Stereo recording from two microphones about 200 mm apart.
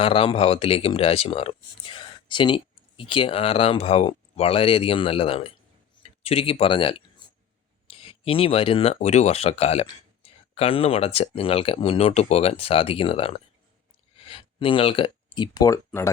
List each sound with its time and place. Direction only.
0.0 s speech: 25° left (ahead or behind)